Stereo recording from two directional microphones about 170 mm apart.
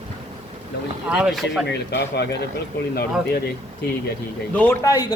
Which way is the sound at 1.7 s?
75° left (ahead or behind).